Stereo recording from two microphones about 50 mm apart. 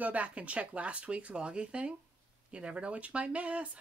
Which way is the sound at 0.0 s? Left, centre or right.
Right.